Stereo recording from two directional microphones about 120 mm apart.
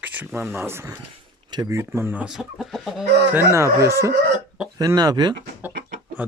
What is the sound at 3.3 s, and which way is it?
Speech, 20° right (ahead or behind).